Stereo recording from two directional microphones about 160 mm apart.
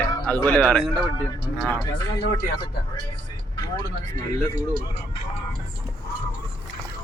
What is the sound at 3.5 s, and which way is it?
Speech, 25° left (ahead or behind).